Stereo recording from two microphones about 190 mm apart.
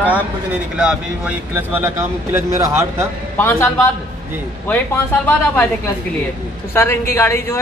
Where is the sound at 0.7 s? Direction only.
5° right (ahead or behind).